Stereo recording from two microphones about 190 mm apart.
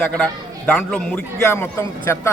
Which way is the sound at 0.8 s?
5° left (ahead or behind).